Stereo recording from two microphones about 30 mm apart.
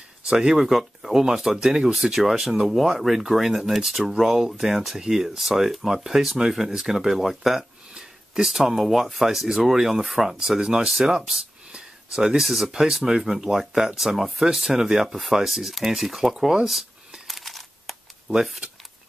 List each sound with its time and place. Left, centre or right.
0.2 s speech: right
0.6 s speech: centre
7.9 s a sound: centre
8.5 s speech: centre
12.7 s speech: centre
17.3 s a sound: centre
18.3 s speech: centre